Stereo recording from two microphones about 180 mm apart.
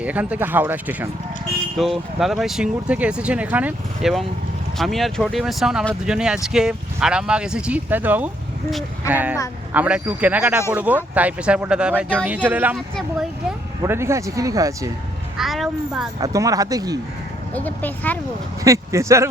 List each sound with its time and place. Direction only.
0.0 s speech: 10° right (ahead or behind)
12.7 s speech: centre (ahead or behind)
13.8 s speech: 15° right (ahead or behind)
15.4 s speech: centre (ahead or behind)
16.2 s speech: 20° right (ahead or behind)
17.5 s speech: 10° left (ahead or behind)
18.6 s speech: 15° right (ahead or behind)